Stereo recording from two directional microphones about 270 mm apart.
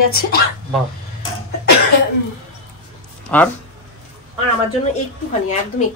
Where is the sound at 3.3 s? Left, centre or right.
Centre.